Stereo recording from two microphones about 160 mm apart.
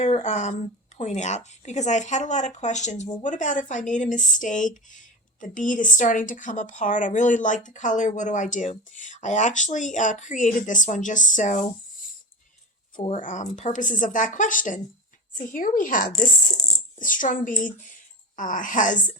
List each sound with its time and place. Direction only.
0.0 s speech: 45° left (ahead or behind)
13.1 s speech: 50° left (ahead or behind)